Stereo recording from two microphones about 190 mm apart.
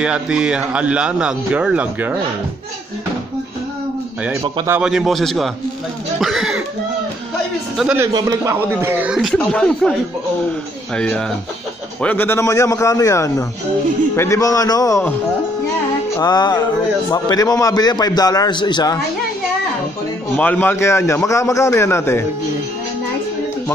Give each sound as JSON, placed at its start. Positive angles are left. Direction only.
{"t": 0.0, "sound": "speech", "side_deg": -5}
{"t": 4.2, "sound": "speech", "side_deg": -10}
{"t": 7.7, "sound": "speech", "side_deg": -5}
{"t": 8.1, "sound": "speech", "side_deg": -20}
{"t": 8.8, "sound": "speech", "side_deg": -10}
{"t": 11.0, "sound": "a man's voice", "side_deg": 5}
{"t": 16.2, "sound": "a man's voice", "side_deg": 20}
{"t": 20.3, "sound": "a man's voice", "side_deg": 10}